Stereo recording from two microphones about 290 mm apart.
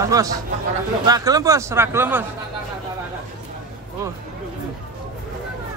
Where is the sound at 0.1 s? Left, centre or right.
Centre.